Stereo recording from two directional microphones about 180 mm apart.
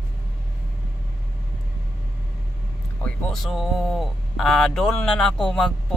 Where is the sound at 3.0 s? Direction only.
5° left (ahead or behind).